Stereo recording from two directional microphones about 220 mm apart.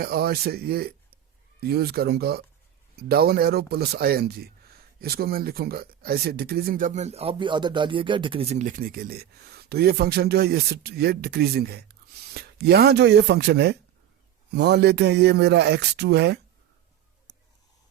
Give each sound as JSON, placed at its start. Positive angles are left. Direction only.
{"t": 0.0, "sound": "speech", "side_deg": -45}